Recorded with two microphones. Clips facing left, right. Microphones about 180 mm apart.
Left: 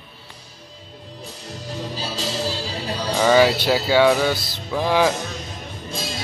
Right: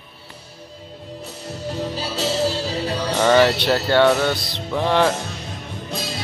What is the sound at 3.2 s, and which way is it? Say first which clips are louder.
Speech: even; 5° left (ahead or behind).